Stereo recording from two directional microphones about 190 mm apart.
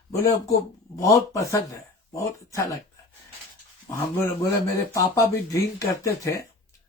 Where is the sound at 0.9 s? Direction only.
15° left (ahead or behind).